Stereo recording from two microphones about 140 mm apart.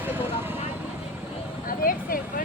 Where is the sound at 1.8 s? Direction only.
90° left.